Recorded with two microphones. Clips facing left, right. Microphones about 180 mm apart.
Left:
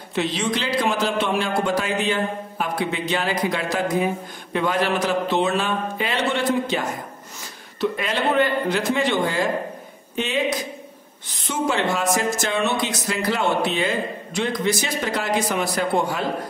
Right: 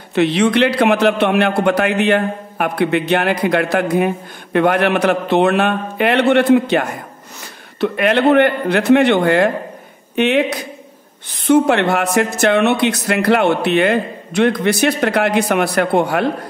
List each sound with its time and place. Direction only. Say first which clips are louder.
0.1 s a man's voice: right 9 dB; 65° right (ahead or behind)